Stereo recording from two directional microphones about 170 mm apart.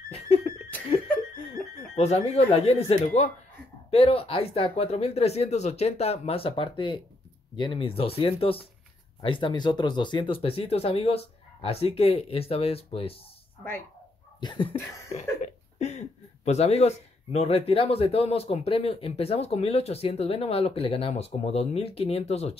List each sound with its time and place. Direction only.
0.1 s a sound: 35° left (ahead or behind)
2.0 s speech: 40° left (ahead or behind)
14.4 s dog: 30° left (ahead or behind)
15.1 s speech: 40° left (ahead or behind)